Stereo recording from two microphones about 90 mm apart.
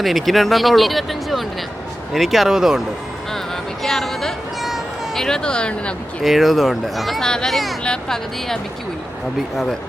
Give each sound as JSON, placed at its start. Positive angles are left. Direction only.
{"t": 0.0, "sound": "speech", "side_deg": 0}
{"t": 3.8, "sound": "a sound", "side_deg": 5}
{"t": 6.2, "sound": "speech", "side_deg": 0}